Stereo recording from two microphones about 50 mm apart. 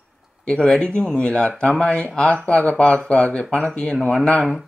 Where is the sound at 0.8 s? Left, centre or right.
Centre.